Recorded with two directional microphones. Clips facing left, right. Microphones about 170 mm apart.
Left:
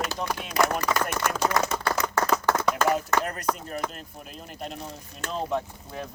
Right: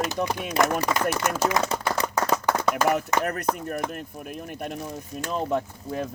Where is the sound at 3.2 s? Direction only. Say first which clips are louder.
Right 3 dB; 55° right (ahead or behind).